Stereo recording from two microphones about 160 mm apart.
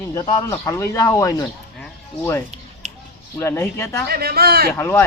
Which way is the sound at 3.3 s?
15° left (ahead or behind).